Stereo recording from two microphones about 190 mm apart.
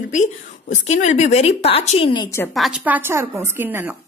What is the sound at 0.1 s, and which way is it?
Speech, 40° left (ahead or behind).